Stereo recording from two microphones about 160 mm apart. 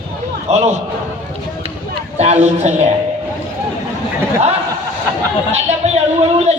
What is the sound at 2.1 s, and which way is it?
Speech, 45° right (ahead or behind).